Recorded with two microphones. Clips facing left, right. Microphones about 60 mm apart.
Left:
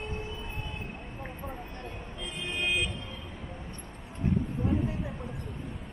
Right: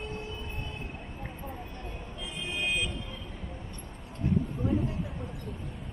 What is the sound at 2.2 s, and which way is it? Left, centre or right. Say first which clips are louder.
Vehicle: left 1 dB; centre.